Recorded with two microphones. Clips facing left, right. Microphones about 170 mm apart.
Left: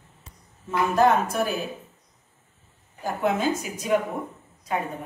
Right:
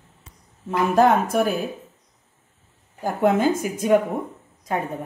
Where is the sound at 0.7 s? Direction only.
50° right (ahead or behind).